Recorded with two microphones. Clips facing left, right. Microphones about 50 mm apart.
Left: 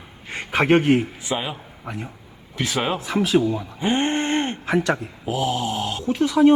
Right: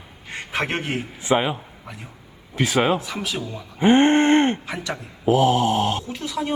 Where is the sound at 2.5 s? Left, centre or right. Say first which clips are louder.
Right 3 dB; right.